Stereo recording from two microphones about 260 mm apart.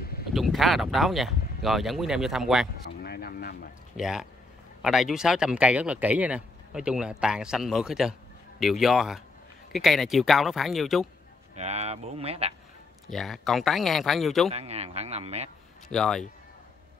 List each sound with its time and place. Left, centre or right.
0.3 s speech: centre
3.0 s a sound: left
3.9 s speech: centre
11.5 s speech: right
13.1 s speech: centre
14.5 s speech: right
15.9 s speech: centre